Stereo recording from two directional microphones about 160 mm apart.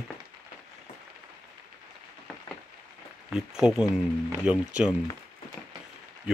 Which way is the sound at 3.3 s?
5° right (ahead or behind).